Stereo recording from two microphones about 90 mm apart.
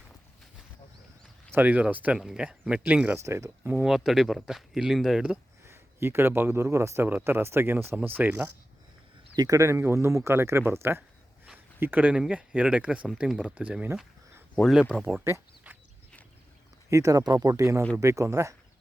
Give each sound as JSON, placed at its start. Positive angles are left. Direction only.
{"t": 1.5, "sound": "speech", "side_deg": -20}
{"t": 2.1, "sound": "speech", "side_deg": -5}
{"t": 3.2, "sound": "speech", "side_deg": -30}
{"t": 3.8, "sound": "speech", "side_deg": -5}
{"t": 5.6, "sound": "a man's voice", "side_deg": -25}
{"t": 7.1, "sound": "speech", "side_deg": -20}
{"t": 9.3, "sound": "speech", "side_deg": -50}
{"t": 9.6, "sound": "speech", "side_deg": -35}
{"t": 11.5, "sound": "a sound", "side_deg": -20}
{"t": 12.3, "sound": "speech", "side_deg": -15}
{"t": 16.9, "sound": "speech", "side_deg": -35}